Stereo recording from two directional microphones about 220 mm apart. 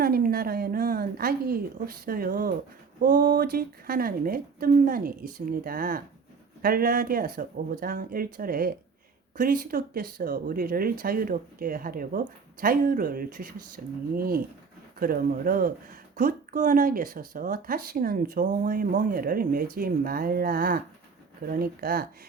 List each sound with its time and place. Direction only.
0.0 s a woman's voice: 45° right (ahead or behind)